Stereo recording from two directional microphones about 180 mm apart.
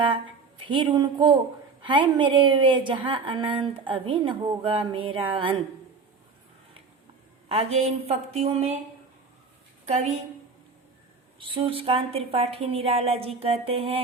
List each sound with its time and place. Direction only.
0.6 s a woman's voice: 25° right (ahead or behind)
7.4 s a woman's voice: 35° right (ahead or behind)
9.9 s a woman's voice: 35° right (ahead or behind)
11.3 s a woman's voice: 30° right (ahead or behind)